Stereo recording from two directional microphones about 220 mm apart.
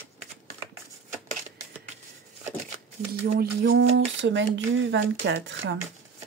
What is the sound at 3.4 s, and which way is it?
Speech, 55° right (ahead or behind).